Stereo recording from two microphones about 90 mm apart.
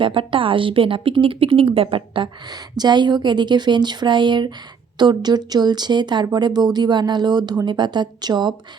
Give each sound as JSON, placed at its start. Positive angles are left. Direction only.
{"t": 0.0, "sound": "speech", "side_deg": -70}
{"t": 2.7, "sound": "speech", "side_deg": -55}